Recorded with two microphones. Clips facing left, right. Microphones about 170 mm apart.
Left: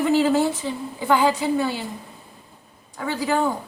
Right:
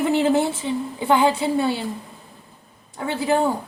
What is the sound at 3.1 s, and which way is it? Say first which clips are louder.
Speech: right 1 dB; 25° right (ahead or behind).